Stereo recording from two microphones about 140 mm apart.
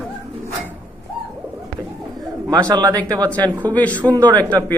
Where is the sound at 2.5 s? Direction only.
25° right (ahead or behind).